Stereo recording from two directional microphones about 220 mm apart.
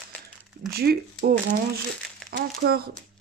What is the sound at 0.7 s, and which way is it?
Speech, 45° right (ahead or behind).